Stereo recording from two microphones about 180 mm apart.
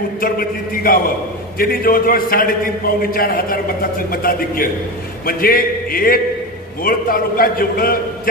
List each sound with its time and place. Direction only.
0.2 s a man's voice: 55° left (ahead or behind)